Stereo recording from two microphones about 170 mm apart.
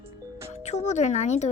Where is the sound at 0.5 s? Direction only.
40° left (ahead or behind).